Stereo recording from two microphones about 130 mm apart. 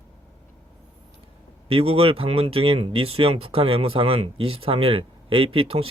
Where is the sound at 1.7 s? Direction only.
45° right (ahead or behind).